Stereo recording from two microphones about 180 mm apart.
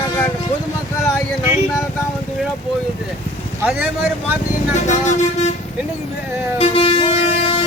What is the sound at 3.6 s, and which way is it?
Speech, 10° right (ahead or behind).